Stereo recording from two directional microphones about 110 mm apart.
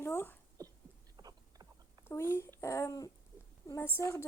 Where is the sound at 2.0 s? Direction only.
20° left (ahead or behind).